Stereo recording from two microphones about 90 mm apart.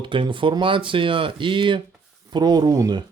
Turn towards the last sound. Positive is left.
turn(degrees=-45)  # may be behind; listen again after turning